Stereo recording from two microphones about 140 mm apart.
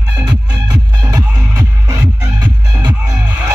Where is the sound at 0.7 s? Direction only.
25° right (ahead or behind).